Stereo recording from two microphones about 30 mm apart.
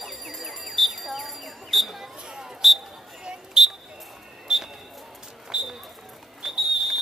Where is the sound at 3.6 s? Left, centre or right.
Centre.